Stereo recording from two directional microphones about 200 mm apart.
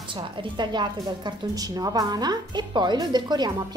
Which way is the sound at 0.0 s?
25° right (ahead or behind).